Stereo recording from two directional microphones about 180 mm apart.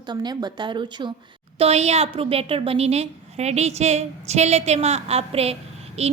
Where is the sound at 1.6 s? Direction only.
35° right (ahead or behind).